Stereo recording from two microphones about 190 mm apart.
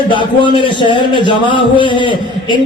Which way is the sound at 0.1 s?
25° left (ahead or behind).